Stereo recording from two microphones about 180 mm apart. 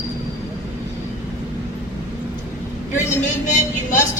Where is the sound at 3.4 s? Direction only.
40° left (ahead or behind).